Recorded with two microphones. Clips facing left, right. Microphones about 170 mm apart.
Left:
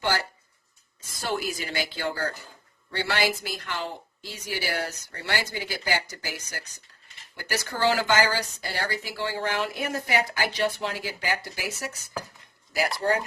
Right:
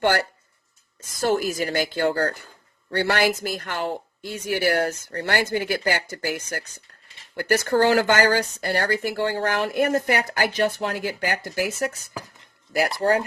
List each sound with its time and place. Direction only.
1.2 s speech: 45° right (ahead or behind)
13.0 s speech: 40° right (ahead or behind)